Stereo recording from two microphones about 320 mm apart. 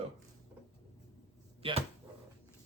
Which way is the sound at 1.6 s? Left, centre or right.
Centre.